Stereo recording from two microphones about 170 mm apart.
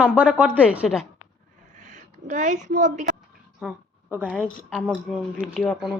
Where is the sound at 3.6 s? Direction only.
10° right (ahead or behind).